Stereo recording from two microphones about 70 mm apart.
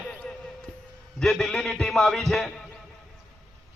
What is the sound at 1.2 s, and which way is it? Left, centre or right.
A man's voice, centre.